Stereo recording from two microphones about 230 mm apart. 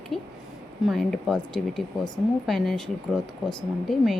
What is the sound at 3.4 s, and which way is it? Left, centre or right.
Speech, centre.